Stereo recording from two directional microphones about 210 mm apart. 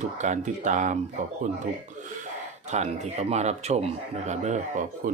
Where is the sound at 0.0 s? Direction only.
35° right (ahead or behind).